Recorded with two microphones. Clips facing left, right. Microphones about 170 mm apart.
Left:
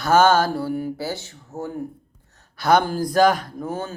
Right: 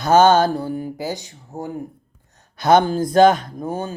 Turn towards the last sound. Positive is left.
turn(degrees=-15)  # may be behind; listen again after turning